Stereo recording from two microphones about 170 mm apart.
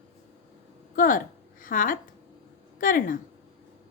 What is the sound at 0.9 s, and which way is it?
A woman's voice, 55° left (ahead or behind).